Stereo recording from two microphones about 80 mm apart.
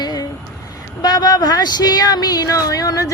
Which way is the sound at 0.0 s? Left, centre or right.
Left.